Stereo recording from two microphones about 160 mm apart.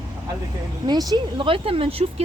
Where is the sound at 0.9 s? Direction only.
25° right (ahead or behind).